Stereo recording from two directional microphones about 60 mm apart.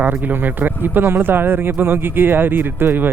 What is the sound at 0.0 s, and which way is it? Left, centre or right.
A man's voice, right.